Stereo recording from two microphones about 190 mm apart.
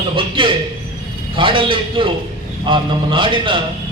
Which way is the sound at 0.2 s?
25° right (ahead or behind).